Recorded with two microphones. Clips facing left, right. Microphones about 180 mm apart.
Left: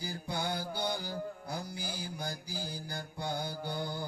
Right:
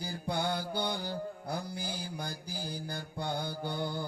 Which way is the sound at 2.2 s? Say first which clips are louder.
Even; 55° right (ahead or behind).